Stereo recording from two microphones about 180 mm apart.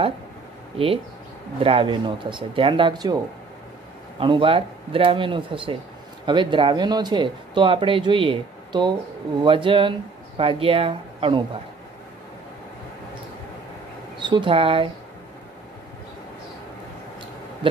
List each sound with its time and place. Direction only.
1.6 s speech: 30° right (ahead or behind)
4.2 s speech: 30° right (ahead or behind)
14.1 s speech: 25° right (ahead or behind)